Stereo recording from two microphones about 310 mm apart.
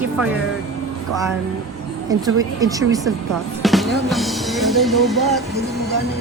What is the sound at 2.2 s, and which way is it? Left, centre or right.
Speech, centre.